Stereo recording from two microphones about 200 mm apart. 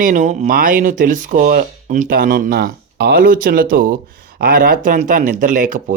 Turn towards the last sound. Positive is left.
turn(degrees=-40)  # may be behind; listen again after turning